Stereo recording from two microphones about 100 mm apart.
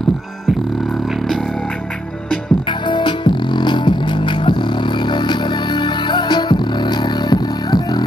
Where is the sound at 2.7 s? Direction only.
50° left (ahead or behind).